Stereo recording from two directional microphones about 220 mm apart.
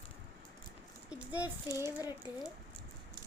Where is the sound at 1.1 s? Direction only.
5° right (ahead or behind).